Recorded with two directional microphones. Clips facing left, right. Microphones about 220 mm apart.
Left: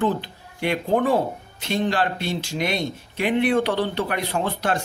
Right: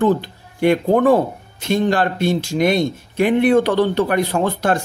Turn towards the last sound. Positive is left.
turn(degrees=-45)  # may be behind; listen again after turning